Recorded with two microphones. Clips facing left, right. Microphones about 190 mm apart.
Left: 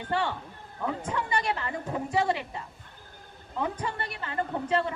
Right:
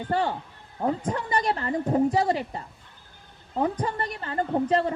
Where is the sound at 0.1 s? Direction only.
40° right (ahead or behind).